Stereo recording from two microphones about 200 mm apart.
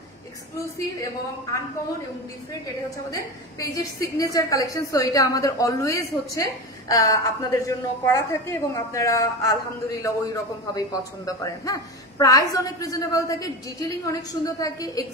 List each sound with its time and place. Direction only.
3.1 s a woman's voice: 15° left (ahead or behind)